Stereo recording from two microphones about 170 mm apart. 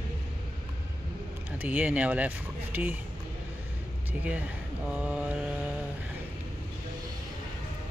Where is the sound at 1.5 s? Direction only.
10° right (ahead or behind).